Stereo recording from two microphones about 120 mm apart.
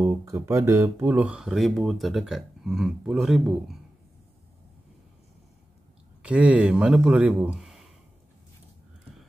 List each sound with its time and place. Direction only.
0.0 s speech: 20° right (ahead or behind)
1.0 s speech: 10° right (ahead or behind)
6.2 s speech: 10° right (ahead or behind)